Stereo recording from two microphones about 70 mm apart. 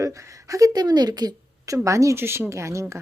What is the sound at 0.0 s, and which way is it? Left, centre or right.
Speech, right.